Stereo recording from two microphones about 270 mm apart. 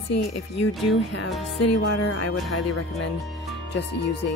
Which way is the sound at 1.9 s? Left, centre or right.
Left.